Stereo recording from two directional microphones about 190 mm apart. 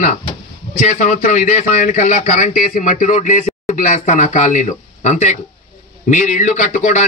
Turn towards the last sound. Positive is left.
turn(degrees=40)  # may be behind; listen again after turning